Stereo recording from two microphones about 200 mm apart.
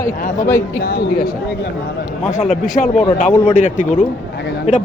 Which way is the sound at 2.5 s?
45° left (ahead or behind).